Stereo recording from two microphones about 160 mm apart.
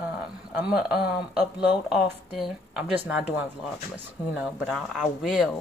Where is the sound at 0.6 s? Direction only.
5° right (ahead or behind).